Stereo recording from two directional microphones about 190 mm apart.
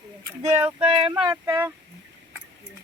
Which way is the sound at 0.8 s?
30° right (ahead or behind).